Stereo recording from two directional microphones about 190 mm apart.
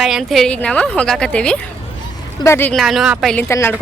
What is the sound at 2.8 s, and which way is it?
Speech, centre (ahead or behind).